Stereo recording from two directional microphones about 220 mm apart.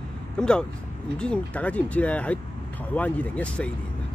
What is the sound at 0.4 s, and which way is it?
Speech, 5° left (ahead or behind).